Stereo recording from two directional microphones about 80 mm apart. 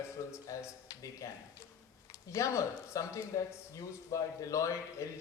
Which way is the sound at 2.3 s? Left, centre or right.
Left.